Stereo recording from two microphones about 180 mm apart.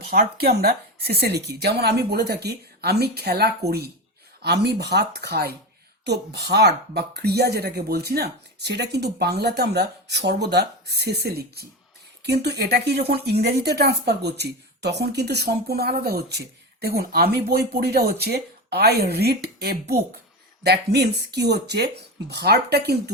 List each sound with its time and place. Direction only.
0.0 s speech: 60° right (ahead or behind)